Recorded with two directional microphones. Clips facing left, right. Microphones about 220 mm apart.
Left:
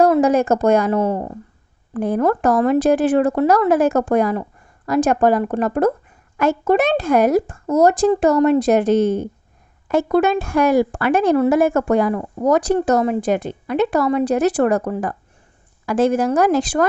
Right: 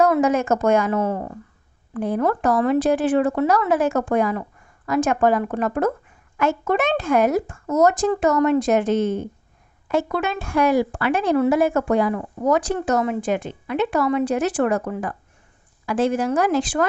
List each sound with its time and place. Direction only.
0.0 s speech: 35° left (ahead or behind)
1.9 s speech: 45° left (ahead or behind)